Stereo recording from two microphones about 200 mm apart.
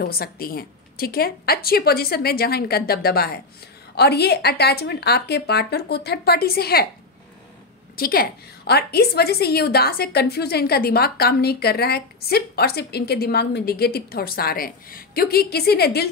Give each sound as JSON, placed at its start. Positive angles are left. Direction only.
{"t": 0.0, "sound": "a woman's voice", "side_deg": 50}
{"t": 7.9, "sound": "a woman's voice", "side_deg": 45}